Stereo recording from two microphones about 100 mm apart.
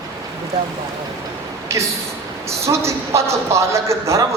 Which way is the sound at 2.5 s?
30° right (ahead or behind).